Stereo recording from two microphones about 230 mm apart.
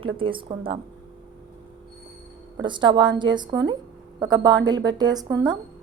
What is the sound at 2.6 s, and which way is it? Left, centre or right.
A woman's voice, centre.